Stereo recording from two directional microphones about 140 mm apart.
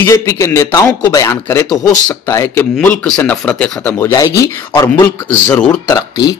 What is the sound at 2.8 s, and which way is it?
Speech, 10° left (ahead or behind).